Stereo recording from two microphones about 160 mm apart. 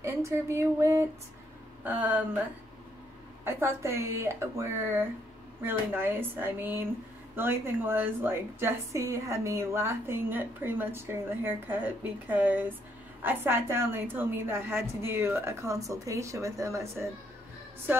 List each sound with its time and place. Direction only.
0.0 s a woman's voice: 15° right (ahead or behind)
3.4 s a woman's voice: 15° right (ahead or behind)